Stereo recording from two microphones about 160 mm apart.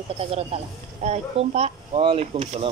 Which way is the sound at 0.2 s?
40° right (ahead or behind).